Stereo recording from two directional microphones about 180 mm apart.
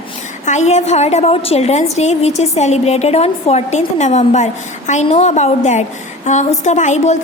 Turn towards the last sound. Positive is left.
turn(degrees=40)  # may be behind; listen again after turning